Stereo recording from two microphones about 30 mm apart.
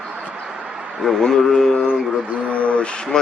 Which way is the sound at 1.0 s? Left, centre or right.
Centre.